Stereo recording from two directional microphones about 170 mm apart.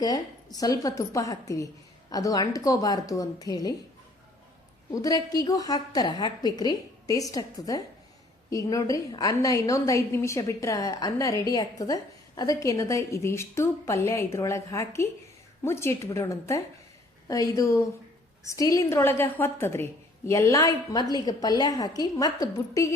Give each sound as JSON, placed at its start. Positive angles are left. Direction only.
{"t": 0.0, "sound": "a woman's voice", "side_deg": 20}
{"t": 4.9, "sound": "a woman's voice", "side_deg": 20}